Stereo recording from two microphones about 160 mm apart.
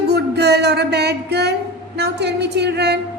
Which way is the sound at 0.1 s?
90° right.